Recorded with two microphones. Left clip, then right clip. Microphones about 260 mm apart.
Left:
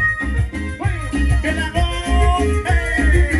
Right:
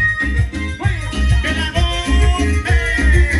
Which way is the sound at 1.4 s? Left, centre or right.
Centre.